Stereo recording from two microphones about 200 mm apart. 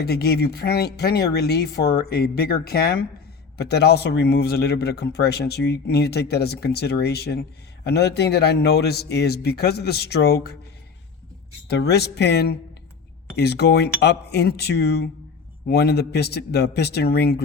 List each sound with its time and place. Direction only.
0.0 s a man's voice: 50° left (ahead or behind)
11.7 s a man's voice: 55° left (ahead or behind)